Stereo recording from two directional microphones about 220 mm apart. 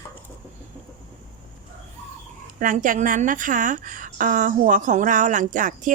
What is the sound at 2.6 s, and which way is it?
A woman's voice, 35° right (ahead or behind).